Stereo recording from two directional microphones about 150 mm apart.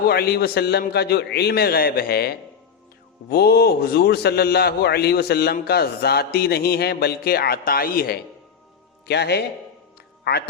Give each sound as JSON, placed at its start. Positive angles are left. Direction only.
{"t": 0.1, "sound": "a man's voice", "side_deg": 90}